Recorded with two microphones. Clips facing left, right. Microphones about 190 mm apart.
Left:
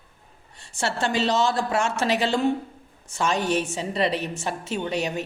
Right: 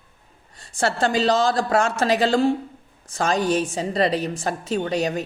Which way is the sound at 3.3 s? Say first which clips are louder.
Right 3 dB; 35° right (ahead or behind).